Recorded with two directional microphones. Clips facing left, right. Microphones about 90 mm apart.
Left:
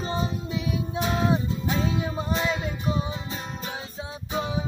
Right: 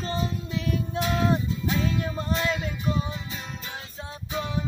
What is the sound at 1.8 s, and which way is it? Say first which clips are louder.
Music: left 1 dB; 10° left (ahead or behind).